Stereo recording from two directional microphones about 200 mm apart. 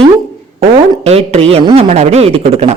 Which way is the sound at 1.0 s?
30° right (ahead or behind).